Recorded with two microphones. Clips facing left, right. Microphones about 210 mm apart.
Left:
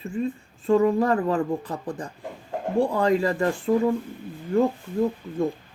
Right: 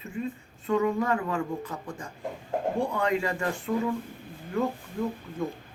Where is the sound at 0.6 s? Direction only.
35° left (ahead or behind).